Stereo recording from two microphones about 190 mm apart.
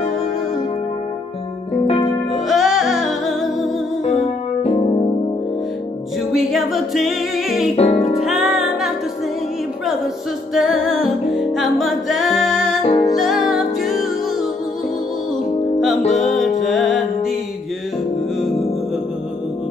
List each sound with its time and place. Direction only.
2.3 s music: centre (ahead or behind)
6.3 s music: centre (ahead or behind)
7.7 s music: 35° left (ahead or behind)
8.2 s music: centre (ahead or behind)
10.5 s music: centre (ahead or behind)
12.8 s music: 25° left (ahead or behind)
13.1 s music: centre (ahead or behind)
16.2 s music: centre (ahead or behind)